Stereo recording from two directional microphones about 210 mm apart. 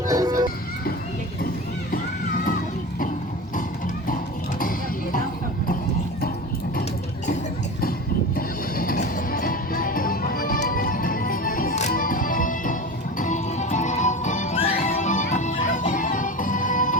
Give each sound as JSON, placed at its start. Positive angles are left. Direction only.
{"t": 0.1, "sound": "music", "side_deg": -15}
{"t": 8.4, "sound": "music", "side_deg": 45}